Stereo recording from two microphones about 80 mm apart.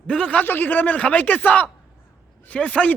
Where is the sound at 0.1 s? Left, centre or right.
Centre.